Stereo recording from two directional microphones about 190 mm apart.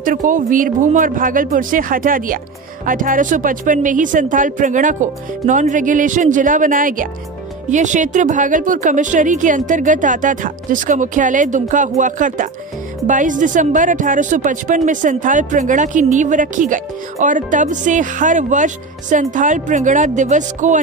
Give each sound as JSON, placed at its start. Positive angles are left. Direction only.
{"t": 0.0, "sound": "a woman's voice", "side_deg": -45}